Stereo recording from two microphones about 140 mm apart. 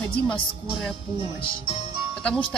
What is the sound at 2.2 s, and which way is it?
Speech, 5° left (ahead or behind).